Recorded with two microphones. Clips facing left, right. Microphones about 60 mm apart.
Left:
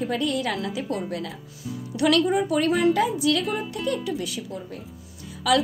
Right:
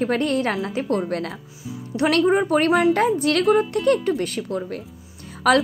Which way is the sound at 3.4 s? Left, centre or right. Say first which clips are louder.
Right 10 dB; right.